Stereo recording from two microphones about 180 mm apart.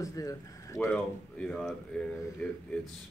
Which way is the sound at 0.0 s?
20° left (ahead or behind).